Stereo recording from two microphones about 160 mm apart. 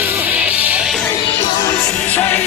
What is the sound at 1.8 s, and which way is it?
Music, 10° left (ahead or behind).